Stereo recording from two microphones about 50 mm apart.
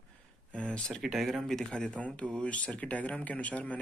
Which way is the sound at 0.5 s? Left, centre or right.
Left.